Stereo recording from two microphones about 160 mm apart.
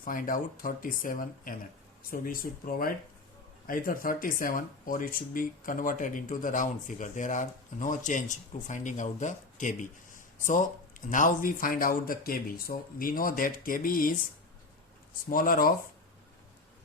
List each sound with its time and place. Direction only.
0.0 s speech: 60° left (ahead or behind)
15.3 s speech: 60° left (ahead or behind)